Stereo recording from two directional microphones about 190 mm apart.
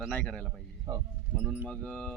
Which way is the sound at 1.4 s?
5° right (ahead or behind).